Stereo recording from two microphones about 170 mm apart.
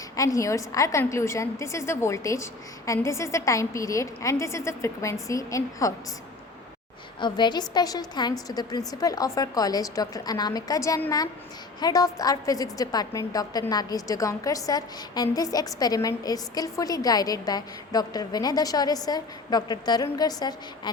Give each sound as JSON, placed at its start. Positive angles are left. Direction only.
{"t": 0.2, "sound": "a woman's voice", "side_deg": 20}
{"t": 7.2, "sound": "a woman's voice", "side_deg": 25}